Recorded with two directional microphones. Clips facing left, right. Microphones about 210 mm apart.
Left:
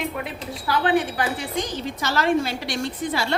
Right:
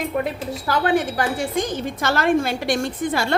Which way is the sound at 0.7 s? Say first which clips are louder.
Right 1 dB; 45° right (ahead or behind).